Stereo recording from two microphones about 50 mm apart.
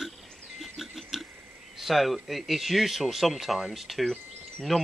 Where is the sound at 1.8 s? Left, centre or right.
Centre.